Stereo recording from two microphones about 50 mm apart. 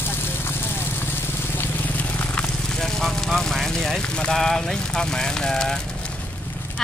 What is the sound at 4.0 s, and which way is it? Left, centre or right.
Speech, left.